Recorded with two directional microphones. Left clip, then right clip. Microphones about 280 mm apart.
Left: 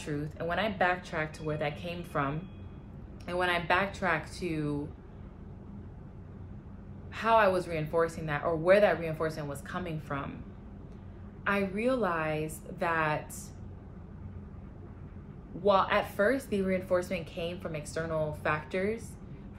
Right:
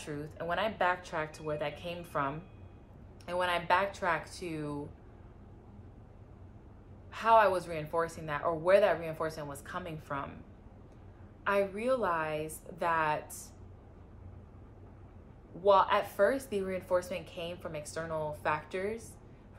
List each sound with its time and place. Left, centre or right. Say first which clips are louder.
0.0 s speech: left 3 dB; centre
7.2 s speech: even; centre
11.4 s speech: even; centre
15.6 s speech: even; centre